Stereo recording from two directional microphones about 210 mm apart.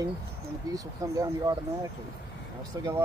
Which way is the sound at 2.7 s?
15° right (ahead or behind).